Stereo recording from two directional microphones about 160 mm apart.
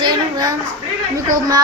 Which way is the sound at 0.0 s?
25° right (ahead or behind).